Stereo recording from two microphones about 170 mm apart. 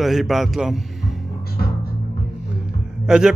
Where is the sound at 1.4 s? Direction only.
65° left (ahead or behind).